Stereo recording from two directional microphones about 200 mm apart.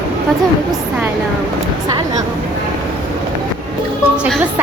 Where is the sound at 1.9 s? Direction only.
20° right (ahead or behind).